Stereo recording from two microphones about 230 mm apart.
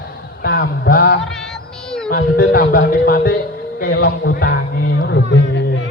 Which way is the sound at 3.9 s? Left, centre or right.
Left.